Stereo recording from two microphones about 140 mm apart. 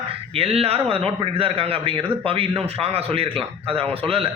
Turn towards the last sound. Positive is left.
turn(degrees=-40)  # may be behind; listen again after turning